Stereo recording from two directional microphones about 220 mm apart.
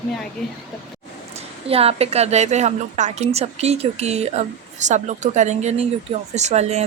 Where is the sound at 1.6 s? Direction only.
25° right (ahead or behind).